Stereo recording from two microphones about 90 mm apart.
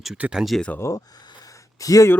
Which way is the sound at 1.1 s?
50° left (ahead or behind).